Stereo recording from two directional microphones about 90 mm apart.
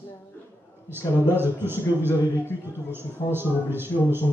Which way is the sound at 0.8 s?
25° right (ahead or behind).